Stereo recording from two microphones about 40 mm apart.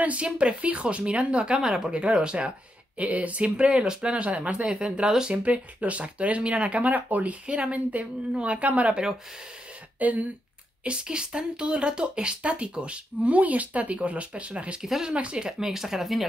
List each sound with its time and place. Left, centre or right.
0.0 s speech: right
1.6 s speech: centre
3.0 s speech: right
5.0 s speech: centre
5.3 s speech: right
7.4 s speech: right
9.9 s speech: right
10.8 s speech: right
14.8 s speech: centre
15.1 s speech: right
15.6 s speech: centre